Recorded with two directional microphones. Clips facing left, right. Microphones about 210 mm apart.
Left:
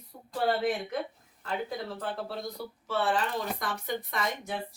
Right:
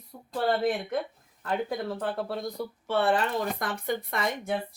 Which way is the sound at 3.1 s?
55° right (ahead or behind).